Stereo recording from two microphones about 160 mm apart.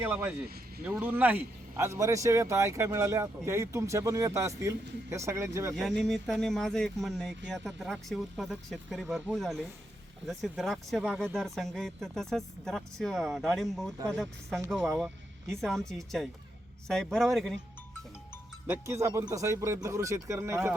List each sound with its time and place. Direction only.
0.0 s speech: 10° right (ahead or behind)
6.0 s speech: centre (ahead or behind)
18.7 s speech: 15° right (ahead or behind)